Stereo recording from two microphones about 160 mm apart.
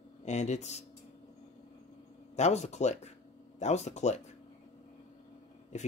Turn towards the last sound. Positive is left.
turn(degrees=45)  # may be behind; listen again after turning